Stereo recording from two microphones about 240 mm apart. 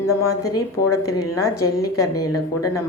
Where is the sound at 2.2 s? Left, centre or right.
Left.